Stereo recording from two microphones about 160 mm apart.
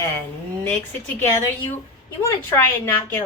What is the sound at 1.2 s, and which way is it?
Speech, 15° left (ahead or behind).